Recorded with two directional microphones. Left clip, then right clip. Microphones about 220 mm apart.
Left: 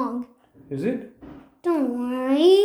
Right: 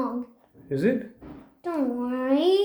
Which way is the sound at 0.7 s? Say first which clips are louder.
Right 3 dB; 50° right (ahead or behind).